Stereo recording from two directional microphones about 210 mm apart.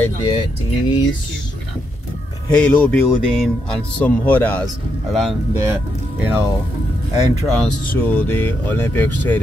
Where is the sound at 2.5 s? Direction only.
10° left (ahead or behind).